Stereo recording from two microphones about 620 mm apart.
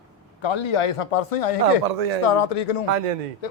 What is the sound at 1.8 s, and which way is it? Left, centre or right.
Speech, right.